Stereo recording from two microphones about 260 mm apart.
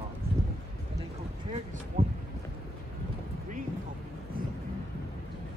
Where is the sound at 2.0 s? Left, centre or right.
Right.